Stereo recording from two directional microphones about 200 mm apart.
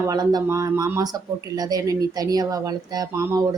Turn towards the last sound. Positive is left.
turn(degrees=-15)  # may be behind; listen again after turning